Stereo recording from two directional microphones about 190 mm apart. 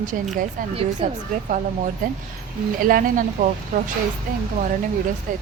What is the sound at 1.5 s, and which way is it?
A woman's voice, 40° right (ahead or behind).